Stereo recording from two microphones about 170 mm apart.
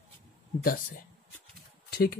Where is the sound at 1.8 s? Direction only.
65° left (ahead or behind).